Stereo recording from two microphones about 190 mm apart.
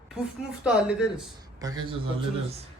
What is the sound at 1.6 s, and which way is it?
Speech, 20° right (ahead or behind).